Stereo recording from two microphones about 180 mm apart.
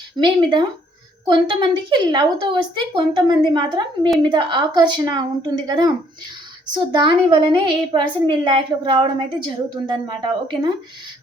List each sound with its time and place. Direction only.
0.2 s a woman's voice: 20° right (ahead or behind)